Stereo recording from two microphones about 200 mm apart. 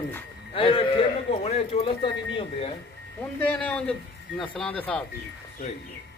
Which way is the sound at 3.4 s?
5° left (ahead or behind).